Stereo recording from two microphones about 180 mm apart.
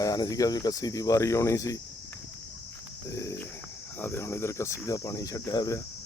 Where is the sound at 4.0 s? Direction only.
15° left (ahead or behind).